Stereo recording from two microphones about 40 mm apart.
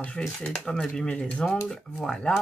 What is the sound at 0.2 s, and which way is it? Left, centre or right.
Speech, centre.